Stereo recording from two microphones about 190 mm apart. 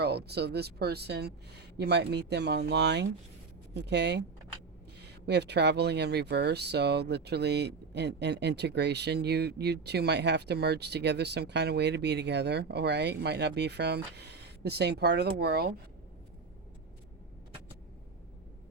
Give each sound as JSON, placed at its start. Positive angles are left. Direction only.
{"t": 0.0, "sound": "speech", "side_deg": -60}